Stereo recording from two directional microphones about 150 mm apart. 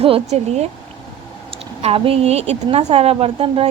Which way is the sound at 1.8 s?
40° right (ahead or behind).